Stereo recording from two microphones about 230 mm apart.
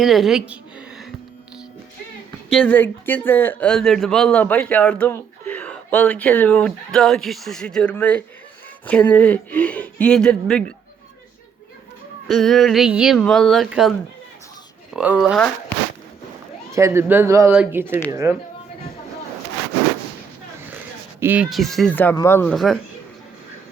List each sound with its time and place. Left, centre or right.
0.0 s a sound: centre
2.5 s speech: centre
12.3 s speech: centre
14.9 s speech: centre
16.7 s speech: centre
21.2 s speech: centre